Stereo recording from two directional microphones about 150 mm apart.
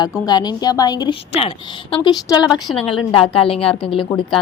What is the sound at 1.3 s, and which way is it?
Speech, 40° left (ahead or behind).